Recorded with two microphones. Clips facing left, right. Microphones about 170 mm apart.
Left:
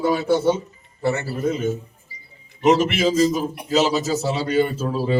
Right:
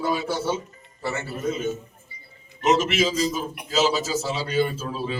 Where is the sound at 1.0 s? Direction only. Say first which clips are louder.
Left 7 dB; 60° left (ahead or behind).